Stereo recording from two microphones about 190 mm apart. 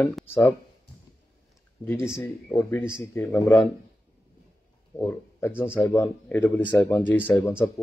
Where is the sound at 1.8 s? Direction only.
10° left (ahead or behind).